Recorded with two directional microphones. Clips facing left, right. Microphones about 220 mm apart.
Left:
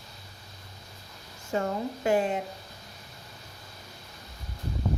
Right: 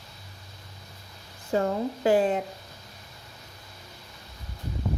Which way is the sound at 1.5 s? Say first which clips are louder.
Right 4 dB; 35° right (ahead or behind).